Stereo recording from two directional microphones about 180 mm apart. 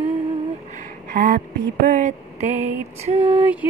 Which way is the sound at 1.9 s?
45° right (ahead or behind).